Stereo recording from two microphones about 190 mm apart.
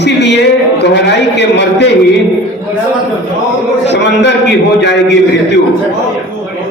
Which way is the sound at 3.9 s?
65° left (ahead or behind).